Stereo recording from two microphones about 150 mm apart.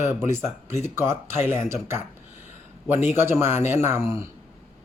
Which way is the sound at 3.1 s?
15° right (ahead or behind).